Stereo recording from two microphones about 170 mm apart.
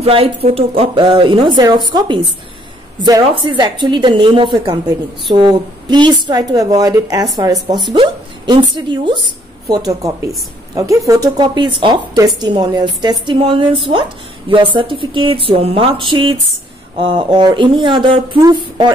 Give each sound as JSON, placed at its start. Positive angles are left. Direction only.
{"t": 0.0, "sound": "a woman's voice", "side_deg": -35}